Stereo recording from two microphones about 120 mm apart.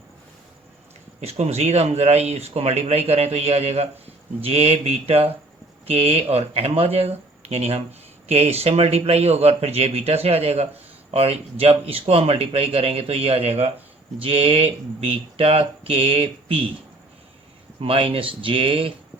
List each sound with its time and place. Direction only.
1.2 s speech: 60° right (ahead or behind)
17.7 s speech: 50° right (ahead or behind)